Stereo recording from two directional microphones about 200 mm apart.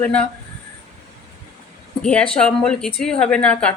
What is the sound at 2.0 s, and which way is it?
Speech, 5° left (ahead or behind).